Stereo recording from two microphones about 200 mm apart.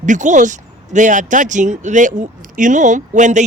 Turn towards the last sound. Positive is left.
turn(degrees=-40)  # may be behind; listen again after turning